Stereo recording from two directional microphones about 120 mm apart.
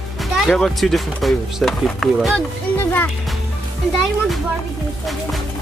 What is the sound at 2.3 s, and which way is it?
Speech, 15° left (ahead or behind).